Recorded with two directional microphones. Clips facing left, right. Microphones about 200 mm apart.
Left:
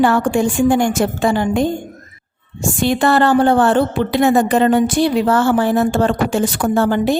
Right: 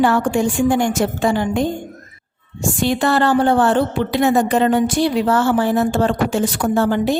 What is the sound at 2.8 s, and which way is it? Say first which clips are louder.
Speech: left 3 dB; 55° left (ahead or behind).